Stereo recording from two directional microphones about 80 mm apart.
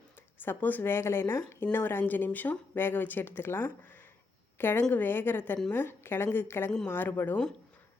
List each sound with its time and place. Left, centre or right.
0.4 s a woman's voice: left